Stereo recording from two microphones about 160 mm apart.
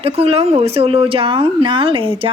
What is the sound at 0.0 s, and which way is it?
Speech, 35° right (ahead or behind).